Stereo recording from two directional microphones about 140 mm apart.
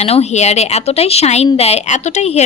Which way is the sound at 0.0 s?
50° left (ahead or behind).